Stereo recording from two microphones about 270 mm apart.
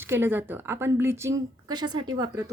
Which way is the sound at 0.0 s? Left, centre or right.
Centre.